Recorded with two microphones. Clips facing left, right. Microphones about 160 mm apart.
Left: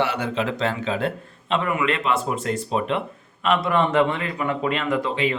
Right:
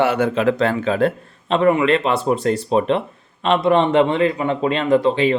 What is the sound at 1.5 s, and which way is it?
Speech, 35° right (ahead or behind).